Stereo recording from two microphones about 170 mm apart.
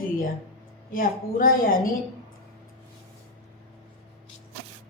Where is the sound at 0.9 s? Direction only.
55° left (ahead or behind).